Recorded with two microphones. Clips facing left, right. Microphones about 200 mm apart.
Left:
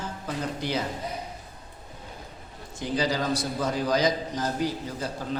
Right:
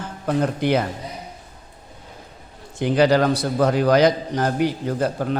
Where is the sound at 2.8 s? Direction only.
65° right (ahead or behind).